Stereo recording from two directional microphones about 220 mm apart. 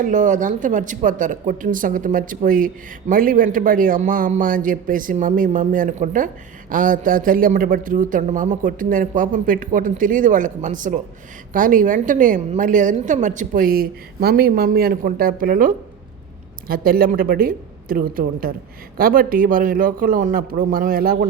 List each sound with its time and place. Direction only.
0.0 s a man's voice: 35° right (ahead or behind)